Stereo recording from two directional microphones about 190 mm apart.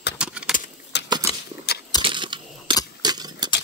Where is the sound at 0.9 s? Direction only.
65° left (ahead or behind).